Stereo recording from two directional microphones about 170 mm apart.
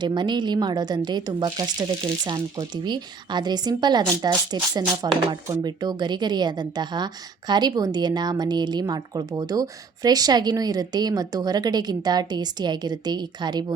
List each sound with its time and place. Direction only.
0.0 s a woman's voice: 25° right (ahead or behind)